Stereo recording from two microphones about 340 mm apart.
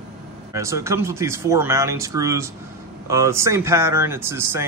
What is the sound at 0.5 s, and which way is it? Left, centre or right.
Speech, centre.